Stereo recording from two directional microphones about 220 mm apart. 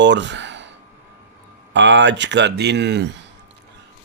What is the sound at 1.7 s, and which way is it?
Speech, 55° right (ahead or behind).